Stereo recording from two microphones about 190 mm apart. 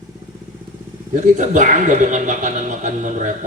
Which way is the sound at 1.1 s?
40° right (ahead or behind).